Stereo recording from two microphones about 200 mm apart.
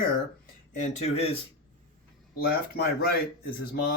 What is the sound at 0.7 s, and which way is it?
Speech, 30° left (ahead or behind).